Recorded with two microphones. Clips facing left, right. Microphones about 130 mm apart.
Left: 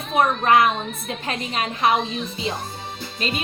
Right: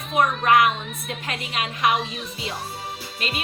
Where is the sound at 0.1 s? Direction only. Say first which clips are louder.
Left 1 dB; 35° left (ahead or behind).